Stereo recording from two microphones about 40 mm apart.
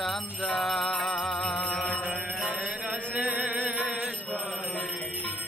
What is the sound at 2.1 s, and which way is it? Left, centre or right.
Music, right.